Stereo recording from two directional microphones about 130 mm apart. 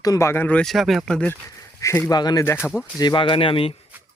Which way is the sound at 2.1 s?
35° left (ahead or behind).